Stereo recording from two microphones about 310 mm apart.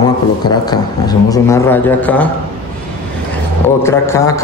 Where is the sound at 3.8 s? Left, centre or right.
Centre.